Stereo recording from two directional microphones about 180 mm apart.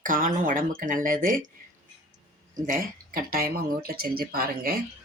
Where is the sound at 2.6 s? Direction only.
50° right (ahead or behind).